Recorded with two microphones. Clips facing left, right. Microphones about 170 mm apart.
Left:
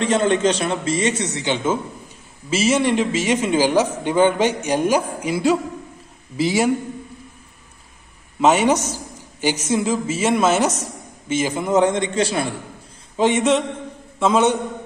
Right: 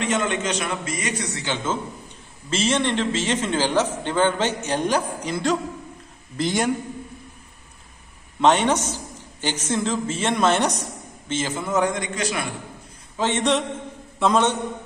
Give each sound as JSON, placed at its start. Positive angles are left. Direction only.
{"t": 0.0, "sound": "a man's voice", "side_deg": 35}
{"t": 8.4, "sound": "a man's voice", "side_deg": 5}
{"t": 13.1, "sound": "a man's voice", "side_deg": 15}
{"t": 13.4, "sound": "a man's voice", "side_deg": 0}